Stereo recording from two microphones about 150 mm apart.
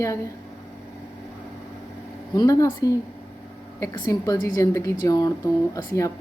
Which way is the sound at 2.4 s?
25° left (ahead or behind).